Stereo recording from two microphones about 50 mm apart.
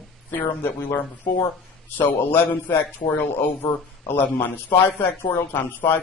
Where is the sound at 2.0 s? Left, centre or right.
Left.